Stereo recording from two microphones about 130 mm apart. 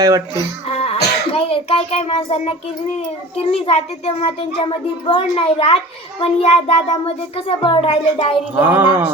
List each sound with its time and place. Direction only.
0.0 s speech: 25° right (ahead or behind)
0.7 s a sound: 50° left (ahead or behind)
3.3 s a child's voice: 50° left (ahead or behind)
8.5 s speech: 15° right (ahead or behind)